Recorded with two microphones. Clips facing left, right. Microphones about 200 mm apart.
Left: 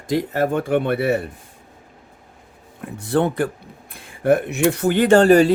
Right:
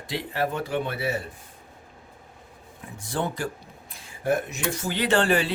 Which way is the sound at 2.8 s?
60° left (ahead or behind).